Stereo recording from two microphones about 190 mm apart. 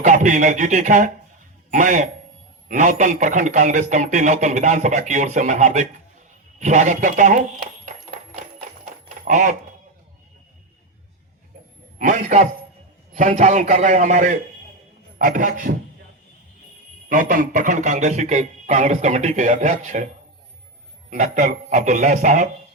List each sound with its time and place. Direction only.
0.0 s speech: 40° right (ahead or behind)
8.6 s a sound: 40° right (ahead or behind)
11.9 s a man's voice: 45° right (ahead or behind)
17.1 s speech: 45° right (ahead or behind)
21.1 s speech: 40° right (ahead or behind)